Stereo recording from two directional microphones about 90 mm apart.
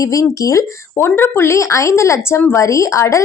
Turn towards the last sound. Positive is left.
turn(degrees=35)  # may be behind; listen again after turning